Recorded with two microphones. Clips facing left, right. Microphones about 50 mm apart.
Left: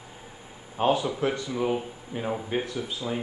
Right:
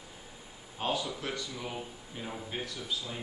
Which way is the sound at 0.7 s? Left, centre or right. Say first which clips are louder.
Left 10 dB; left.